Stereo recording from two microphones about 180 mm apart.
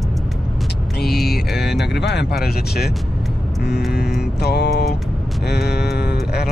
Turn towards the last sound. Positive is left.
turn(degrees=65)  # may be behind; listen again after turning